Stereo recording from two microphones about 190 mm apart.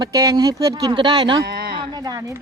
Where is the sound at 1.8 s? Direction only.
20° right (ahead or behind).